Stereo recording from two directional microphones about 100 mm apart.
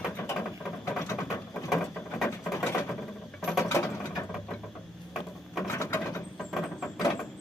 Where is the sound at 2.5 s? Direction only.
30° left (ahead or behind).